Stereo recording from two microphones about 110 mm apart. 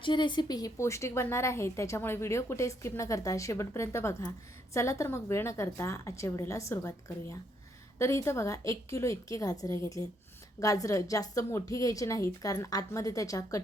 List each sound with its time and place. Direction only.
0.0 s a woman's voice: 45° left (ahead or behind)
0.8 s a woman's voice: 25° left (ahead or behind)